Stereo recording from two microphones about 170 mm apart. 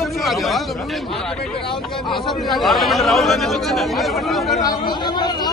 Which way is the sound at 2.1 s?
Centre (ahead or behind).